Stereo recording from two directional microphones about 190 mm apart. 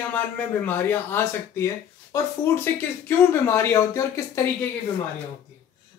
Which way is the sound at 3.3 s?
15° left (ahead or behind).